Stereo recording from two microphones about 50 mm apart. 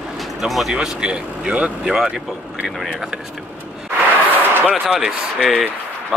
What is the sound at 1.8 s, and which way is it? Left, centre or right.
Speech, centre.